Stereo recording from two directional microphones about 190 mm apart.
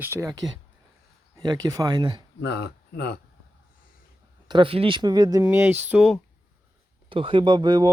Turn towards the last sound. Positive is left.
turn(degrees=-20)  # may be behind; listen again after turning